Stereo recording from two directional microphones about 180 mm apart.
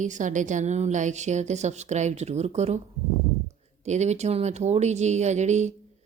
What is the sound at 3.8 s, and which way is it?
Speech, 40° right (ahead or behind).